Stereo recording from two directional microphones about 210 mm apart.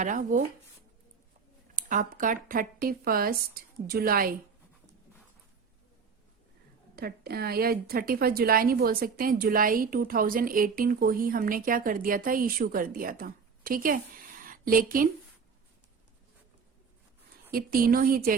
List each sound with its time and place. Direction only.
0.0 s speech: 40° right (ahead or behind)
1.7 s a woman's voice: 40° right (ahead or behind)
6.9 s a woman's voice: 50° right (ahead or behind)
17.5 s a woman's voice: 45° right (ahead or behind)